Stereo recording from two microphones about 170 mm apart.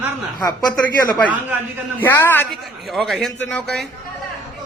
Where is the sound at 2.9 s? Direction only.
Centre (ahead or behind).